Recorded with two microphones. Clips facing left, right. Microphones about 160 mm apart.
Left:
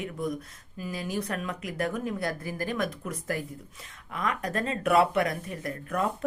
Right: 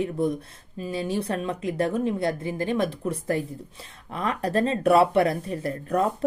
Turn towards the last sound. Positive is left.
turn(degrees=-35)  # may be behind; listen again after turning